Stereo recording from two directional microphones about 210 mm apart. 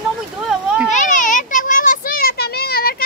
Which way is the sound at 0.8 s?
35° left (ahead or behind).